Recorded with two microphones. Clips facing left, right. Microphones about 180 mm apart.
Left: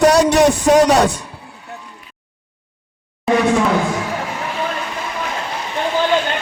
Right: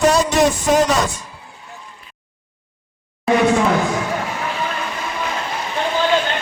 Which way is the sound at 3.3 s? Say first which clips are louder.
Even; centre (ahead or behind).